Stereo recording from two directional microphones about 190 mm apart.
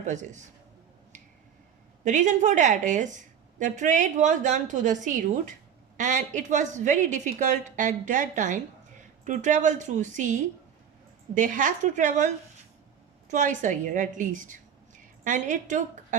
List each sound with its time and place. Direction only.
0.0 s a woman's voice: 40° right (ahead or behind)
2.0 s a woman's voice: 40° right (ahead or behind)